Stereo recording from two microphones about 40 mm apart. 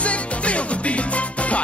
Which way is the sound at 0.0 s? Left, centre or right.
Left.